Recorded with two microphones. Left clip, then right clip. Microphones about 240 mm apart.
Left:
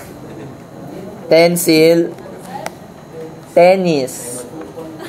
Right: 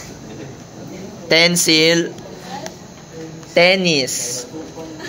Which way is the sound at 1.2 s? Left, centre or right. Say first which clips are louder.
Left 3 dB; centre.